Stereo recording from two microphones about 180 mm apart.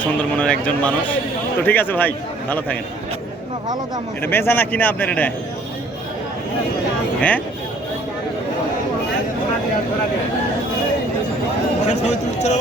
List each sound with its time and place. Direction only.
0.0 s a man's voice: 5° left (ahead or behind)
4.2 s a man's voice: 10° left (ahead or behind)
7.2 s a man's voice: 10° left (ahead or behind)
11.9 s a man's voice: 40° left (ahead or behind)